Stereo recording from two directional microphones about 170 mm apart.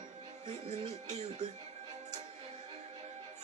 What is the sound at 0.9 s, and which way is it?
Speech, 40° right (ahead or behind).